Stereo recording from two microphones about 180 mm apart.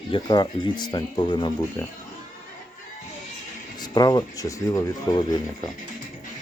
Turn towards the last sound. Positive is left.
turn(degrees=20)  # may be behind; listen again after turning